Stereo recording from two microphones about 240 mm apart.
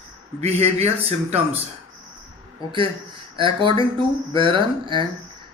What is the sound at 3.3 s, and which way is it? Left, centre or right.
Speech, right.